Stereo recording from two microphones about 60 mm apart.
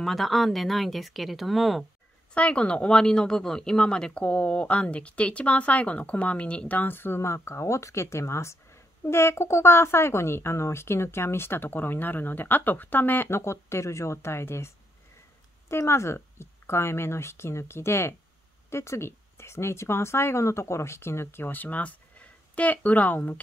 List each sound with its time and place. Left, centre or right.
0.0 s speech: centre
2.3 s speech: centre
6.9 s speech: left
15.7 s speech: left